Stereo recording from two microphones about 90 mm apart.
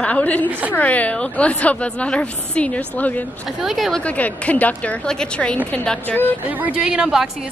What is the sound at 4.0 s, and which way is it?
A woman's voice, 15° left (ahead or behind).